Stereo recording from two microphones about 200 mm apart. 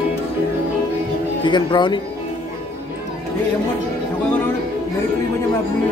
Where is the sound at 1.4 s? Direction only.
20° left (ahead or behind).